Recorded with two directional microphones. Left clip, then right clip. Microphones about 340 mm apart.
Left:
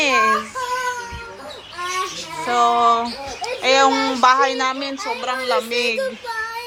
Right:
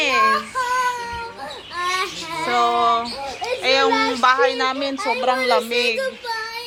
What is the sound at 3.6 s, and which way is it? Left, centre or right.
A child's voice, centre.